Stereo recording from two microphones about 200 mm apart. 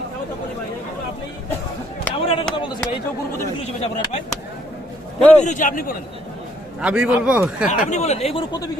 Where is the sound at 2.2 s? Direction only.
30° left (ahead or behind).